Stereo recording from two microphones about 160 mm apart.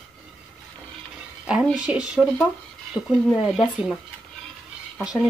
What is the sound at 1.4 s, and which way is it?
Speech, 5° right (ahead or behind).